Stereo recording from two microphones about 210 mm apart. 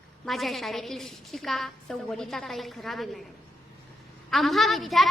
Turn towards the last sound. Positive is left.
turn(degrees=0)  # may be behind; listen again after turning